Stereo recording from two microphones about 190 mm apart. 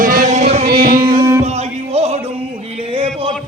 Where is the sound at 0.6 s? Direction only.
50° right (ahead or behind).